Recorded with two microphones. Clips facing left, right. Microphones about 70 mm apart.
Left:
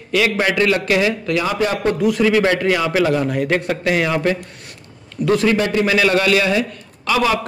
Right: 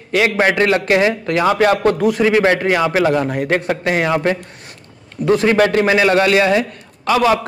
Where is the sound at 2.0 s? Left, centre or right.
Right.